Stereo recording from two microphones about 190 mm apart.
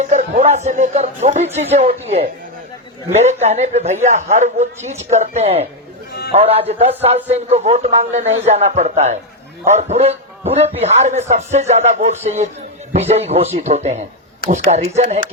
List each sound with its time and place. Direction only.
0.0 s a man's voice: 40° right (ahead or behind)